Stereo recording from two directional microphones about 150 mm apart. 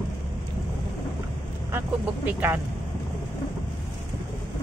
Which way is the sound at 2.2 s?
10° right (ahead or behind).